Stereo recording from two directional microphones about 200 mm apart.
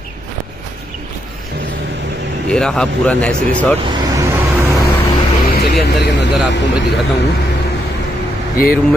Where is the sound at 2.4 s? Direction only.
5° left (ahead or behind).